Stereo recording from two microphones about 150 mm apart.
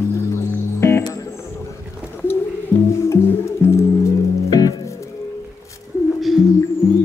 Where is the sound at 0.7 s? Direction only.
15° left (ahead or behind).